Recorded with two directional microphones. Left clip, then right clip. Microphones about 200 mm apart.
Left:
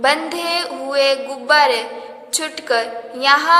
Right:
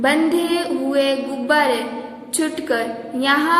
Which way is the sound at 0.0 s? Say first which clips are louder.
Even; 25° left (ahead or behind).